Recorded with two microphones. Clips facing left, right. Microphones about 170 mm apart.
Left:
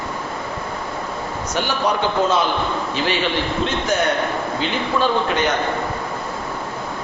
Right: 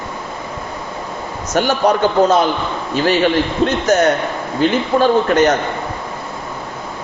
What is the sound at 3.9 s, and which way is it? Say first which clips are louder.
A man's voice: right 5 dB; 40° right (ahead or behind).